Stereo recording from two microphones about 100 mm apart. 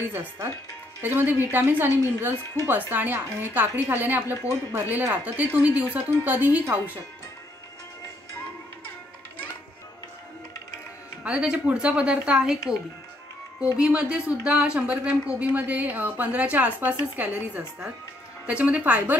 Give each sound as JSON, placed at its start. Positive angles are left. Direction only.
{"t": 0.1, "sound": "a woman's voice", "side_deg": -20}
{"t": 11.2, "sound": "a woman's voice", "side_deg": -10}
{"t": 13.7, "sound": "a woman's voice", "side_deg": -10}